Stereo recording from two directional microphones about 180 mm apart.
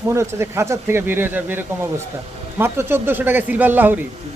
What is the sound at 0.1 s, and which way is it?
Speech, 15° right (ahead or behind).